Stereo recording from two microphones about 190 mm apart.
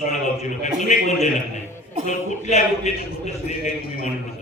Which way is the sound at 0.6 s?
40° left (ahead or behind).